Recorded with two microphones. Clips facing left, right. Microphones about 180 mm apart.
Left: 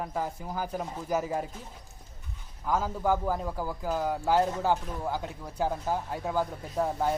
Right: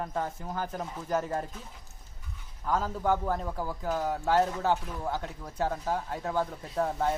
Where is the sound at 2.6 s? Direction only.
10° left (ahead or behind).